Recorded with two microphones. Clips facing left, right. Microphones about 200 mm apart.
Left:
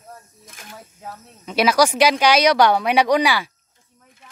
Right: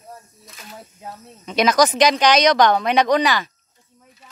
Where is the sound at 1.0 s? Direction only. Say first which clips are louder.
Even; 5° left (ahead or behind).